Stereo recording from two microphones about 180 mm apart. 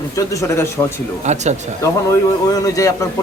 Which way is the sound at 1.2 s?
40° right (ahead or behind).